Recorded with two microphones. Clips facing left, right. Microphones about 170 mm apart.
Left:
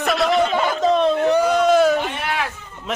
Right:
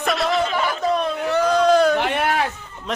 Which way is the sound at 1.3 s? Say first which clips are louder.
Right 3 dB; 5° left (ahead or behind).